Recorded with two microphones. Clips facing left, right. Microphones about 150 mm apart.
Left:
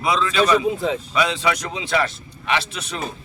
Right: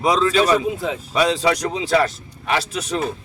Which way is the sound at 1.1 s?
35° right (ahead or behind).